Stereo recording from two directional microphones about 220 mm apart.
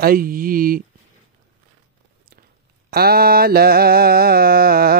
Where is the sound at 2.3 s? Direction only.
40° right (ahead or behind).